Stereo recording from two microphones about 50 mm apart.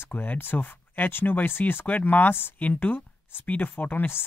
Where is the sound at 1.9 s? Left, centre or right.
Left.